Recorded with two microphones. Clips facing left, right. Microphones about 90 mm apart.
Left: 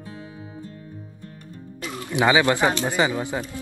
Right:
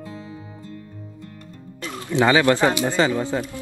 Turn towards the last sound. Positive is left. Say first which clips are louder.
# right 2 dB
turn(degrees=15)  # may be behind; listen again after turning